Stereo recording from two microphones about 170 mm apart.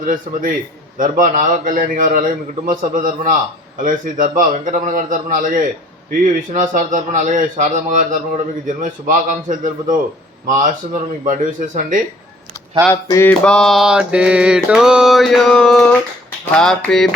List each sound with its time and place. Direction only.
0.0 s a man's voice: 50° right (ahead or behind)
12.9 s a sound: 15° left (ahead or behind)
13.4 s mantra: 5° left (ahead or behind)